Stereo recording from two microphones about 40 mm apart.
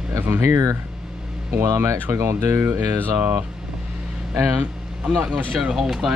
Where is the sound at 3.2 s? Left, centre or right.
Right.